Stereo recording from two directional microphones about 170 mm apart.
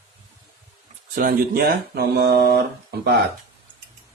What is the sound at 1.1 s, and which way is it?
Speech, 60° right (ahead or behind).